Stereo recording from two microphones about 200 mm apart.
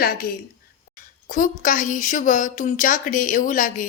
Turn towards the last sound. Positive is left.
turn(degrees=40)  # may be behind; listen again after turning